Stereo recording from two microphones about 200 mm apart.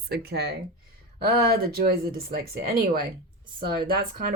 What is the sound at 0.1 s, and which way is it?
Speech, 55° right (ahead or behind).